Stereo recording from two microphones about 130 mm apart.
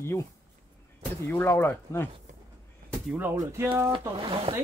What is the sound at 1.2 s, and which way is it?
Speech, 20° left (ahead or behind).